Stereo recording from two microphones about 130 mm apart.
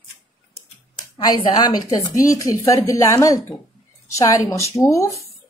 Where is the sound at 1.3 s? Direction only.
30° left (ahead or behind).